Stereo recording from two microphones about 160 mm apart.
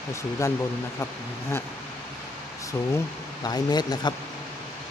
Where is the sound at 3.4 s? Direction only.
25° left (ahead or behind).